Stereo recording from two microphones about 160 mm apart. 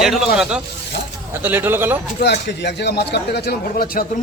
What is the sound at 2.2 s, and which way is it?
Speech, 90° left.